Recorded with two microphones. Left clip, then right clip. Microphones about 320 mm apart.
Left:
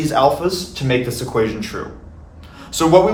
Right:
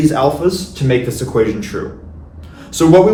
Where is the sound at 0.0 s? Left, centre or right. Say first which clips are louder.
Right 2 dB; centre.